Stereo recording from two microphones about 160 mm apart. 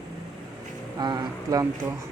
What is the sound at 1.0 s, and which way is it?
Speech, 25° right (ahead or behind).